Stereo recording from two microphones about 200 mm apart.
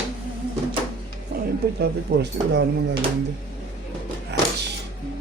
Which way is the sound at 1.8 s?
55° right (ahead or behind).